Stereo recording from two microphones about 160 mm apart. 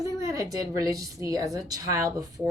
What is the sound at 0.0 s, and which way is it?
A woman's voice, 20° right (ahead or behind).